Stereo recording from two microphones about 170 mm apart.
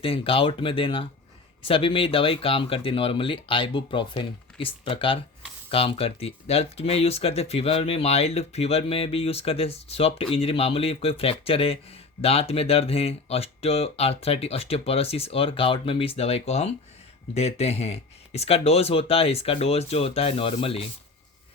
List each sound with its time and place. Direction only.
0.0 s speech: 30° left (ahead or behind)